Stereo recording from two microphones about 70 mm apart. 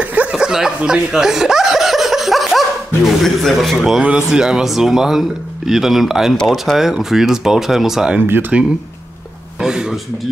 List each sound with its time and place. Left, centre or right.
0.0 s chuckle: right; by 3.7 s centre
3.7 s speech: centre
8.3 s speech: right
9.6 s a man's voice: centre